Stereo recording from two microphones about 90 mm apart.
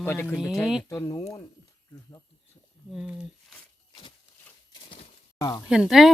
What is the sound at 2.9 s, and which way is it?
Speech, 5° right (ahead or behind).